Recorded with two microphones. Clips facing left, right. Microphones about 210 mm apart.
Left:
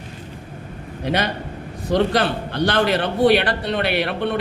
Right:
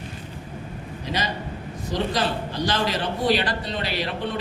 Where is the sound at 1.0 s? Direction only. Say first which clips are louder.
Left 6 dB; 60° left (ahead or behind).